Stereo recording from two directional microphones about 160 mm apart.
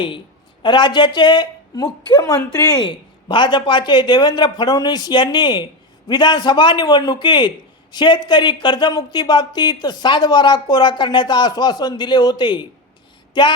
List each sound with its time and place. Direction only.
0.6 s speech: 30° left (ahead or behind)